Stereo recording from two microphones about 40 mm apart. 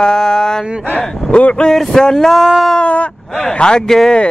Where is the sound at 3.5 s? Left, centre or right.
Left.